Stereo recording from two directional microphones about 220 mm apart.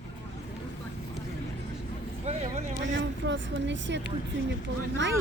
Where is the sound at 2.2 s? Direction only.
30° right (ahead or behind).